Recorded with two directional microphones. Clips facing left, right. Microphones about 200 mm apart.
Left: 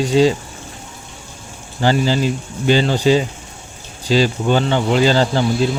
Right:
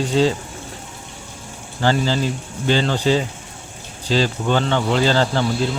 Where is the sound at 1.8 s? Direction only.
15° left (ahead or behind).